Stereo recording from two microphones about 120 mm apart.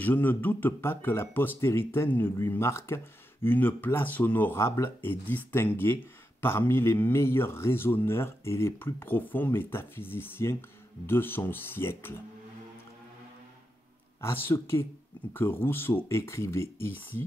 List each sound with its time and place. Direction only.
0.0 s speech: 15° left (ahead or behind)
14.2 s speech: 20° left (ahead or behind)